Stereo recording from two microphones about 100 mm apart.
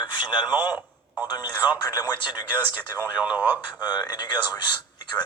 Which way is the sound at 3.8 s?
45° left (ahead or behind).